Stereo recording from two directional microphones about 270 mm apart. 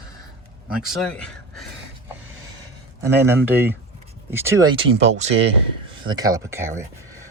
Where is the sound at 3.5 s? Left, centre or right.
Centre.